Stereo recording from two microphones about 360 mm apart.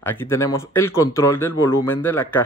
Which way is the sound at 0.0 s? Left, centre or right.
Centre.